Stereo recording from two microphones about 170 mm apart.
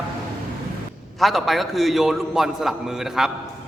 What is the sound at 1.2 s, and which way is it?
A man's voice, centre (ahead or behind).